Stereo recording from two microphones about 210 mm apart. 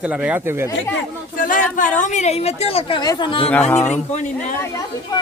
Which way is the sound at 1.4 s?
40° left (ahead or behind).